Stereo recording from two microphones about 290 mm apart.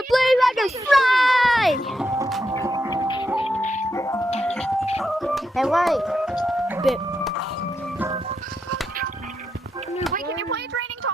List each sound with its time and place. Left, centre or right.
0.1 s children playing: centre
2.0 s music: centre
3.6 s music: left
3.9 s music: centre
6.4 s a sound: centre
10.2 s a sound: right